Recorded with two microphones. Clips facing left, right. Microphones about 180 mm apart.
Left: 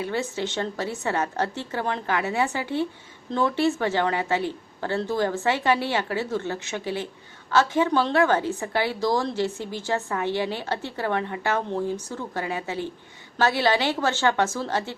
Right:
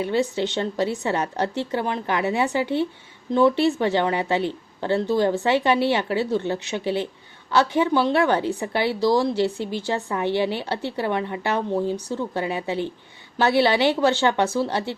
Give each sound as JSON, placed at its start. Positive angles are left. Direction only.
{"t": 0.0, "sound": "speech", "side_deg": -15}